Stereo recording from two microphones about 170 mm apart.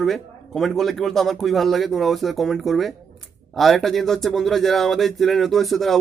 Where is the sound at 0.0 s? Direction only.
Centre (ahead or behind).